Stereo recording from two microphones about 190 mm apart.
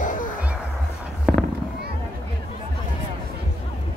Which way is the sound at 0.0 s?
45° left (ahead or behind).